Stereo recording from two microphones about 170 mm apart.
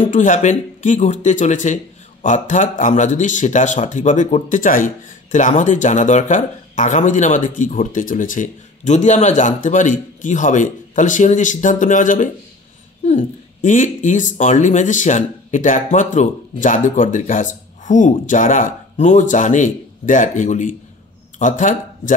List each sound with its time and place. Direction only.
0.1 s speech: 50° left (ahead or behind)